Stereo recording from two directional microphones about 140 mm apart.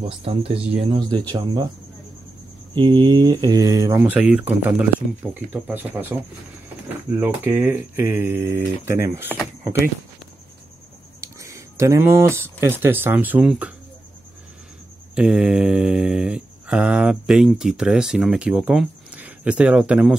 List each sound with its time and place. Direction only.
0.1 s speech: 45° right (ahead or behind)
2.7 s speech: 35° right (ahead or behind)
4.0 s speech: 10° right (ahead or behind)
7.2 s speech: 15° right (ahead or behind)
11.1 s speech: 25° right (ahead or behind)
15.1 s mantra: 5° right (ahead or behind)